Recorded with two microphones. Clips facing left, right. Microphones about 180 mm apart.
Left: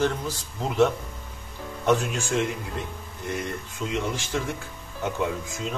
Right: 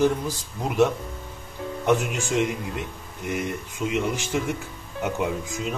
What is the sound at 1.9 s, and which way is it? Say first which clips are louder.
Speech: even; 15° right (ahead or behind).